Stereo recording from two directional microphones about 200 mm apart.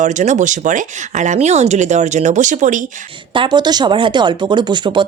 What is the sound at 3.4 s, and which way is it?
Speech, 20° right (ahead or behind).